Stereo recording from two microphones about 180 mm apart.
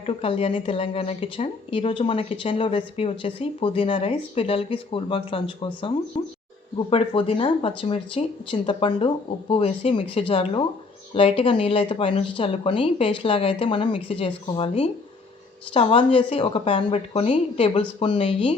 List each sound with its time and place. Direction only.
0.0 s speech: 30° left (ahead or behind)